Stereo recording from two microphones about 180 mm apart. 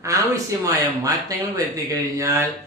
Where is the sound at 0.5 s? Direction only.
20° right (ahead or behind).